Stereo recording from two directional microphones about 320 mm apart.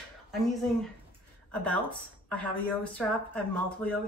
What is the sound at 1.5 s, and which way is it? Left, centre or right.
Speech, centre.